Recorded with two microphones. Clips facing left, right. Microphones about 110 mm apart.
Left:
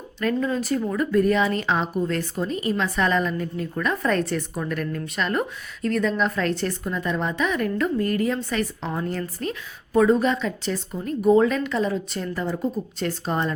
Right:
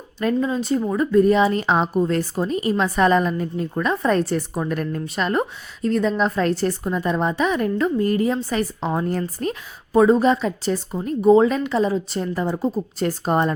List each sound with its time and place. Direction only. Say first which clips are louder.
0.2 s a woman's voice: right 3 dB; 20° right (ahead or behind); by 9.6 s 40° right (ahead or behind)
9.9 s a woman's voice: right 3 dB; 30° right (ahead or behind)